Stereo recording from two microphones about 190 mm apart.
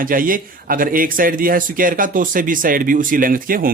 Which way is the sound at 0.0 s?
45° right (ahead or behind).